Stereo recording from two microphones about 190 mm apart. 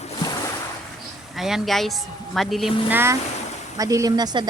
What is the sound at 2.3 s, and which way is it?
A woman's voice, centre (ahead or behind).